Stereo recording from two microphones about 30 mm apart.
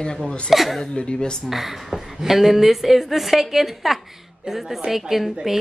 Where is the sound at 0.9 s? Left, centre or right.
Left.